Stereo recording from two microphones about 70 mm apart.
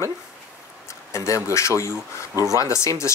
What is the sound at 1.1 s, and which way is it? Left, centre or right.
Speech, left.